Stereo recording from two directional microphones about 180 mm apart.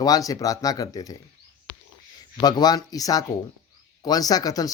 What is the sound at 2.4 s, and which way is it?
Speech, 20° left (ahead or behind).